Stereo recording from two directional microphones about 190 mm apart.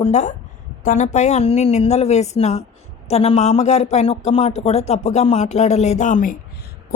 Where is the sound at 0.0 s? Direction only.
35° left (ahead or behind).